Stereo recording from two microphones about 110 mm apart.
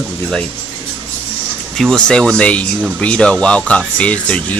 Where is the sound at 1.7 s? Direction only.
5° left (ahead or behind).